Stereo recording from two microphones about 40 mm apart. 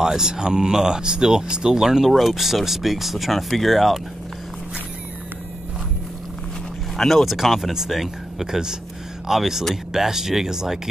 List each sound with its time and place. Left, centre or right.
0.0 s speech: centre
7.0 s speech: centre